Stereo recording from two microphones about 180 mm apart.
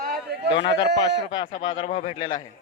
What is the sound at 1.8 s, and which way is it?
Speech, 35° left (ahead or behind).